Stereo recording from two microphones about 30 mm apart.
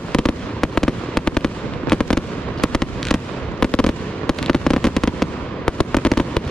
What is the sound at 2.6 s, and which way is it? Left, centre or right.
Fireworks, centre.